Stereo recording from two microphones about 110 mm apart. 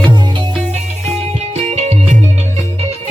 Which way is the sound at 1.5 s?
85° right.